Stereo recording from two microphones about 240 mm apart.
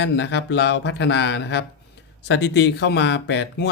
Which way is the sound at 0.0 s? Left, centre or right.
Left.